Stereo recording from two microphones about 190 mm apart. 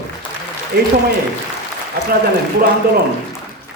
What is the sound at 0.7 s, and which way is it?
Speech, 55° right (ahead or behind).